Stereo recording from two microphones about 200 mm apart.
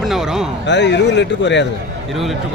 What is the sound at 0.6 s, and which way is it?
Speech, 60° left (ahead or behind).